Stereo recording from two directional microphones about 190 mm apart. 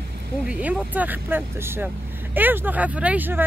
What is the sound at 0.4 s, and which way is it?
Speech, 5° right (ahead or behind).